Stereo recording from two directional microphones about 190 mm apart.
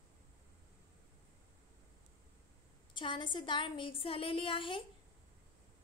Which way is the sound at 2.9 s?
25° left (ahead or behind).